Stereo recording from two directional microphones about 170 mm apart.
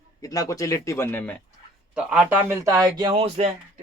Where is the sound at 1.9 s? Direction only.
5° right (ahead or behind).